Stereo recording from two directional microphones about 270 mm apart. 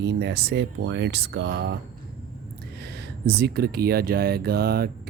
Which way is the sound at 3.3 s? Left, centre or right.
Right.